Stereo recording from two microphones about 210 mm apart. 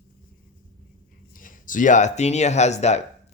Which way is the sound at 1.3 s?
40° left (ahead or behind).